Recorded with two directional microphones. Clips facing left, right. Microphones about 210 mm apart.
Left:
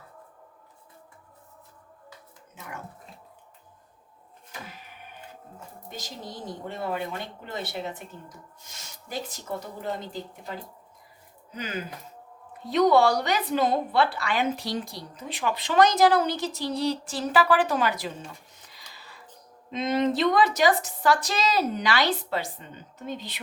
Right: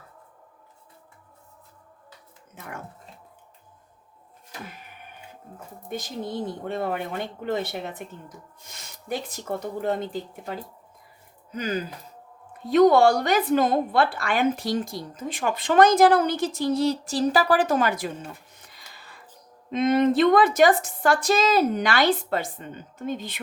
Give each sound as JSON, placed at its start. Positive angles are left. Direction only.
{"t": 5.9, "sound": "speech", "side_deg": -55}
{"t": 11.5, "sound": "a woman's voice", "side_deg": -40}
{"t": 18.9, "sound": "music", "side_deg": -50}
{"t": 19.7, "sound": "a woman's voice", "side_deg": -55}